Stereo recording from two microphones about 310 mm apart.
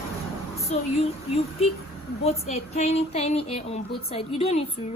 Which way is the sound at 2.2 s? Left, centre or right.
Left.